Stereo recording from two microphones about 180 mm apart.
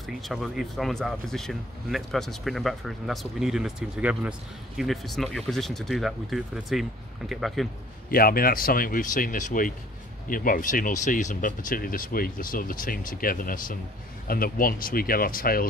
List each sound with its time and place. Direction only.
0.0 s speech: centre (ahead or behind)
8.1 s speech: 55° left (ahead or behind)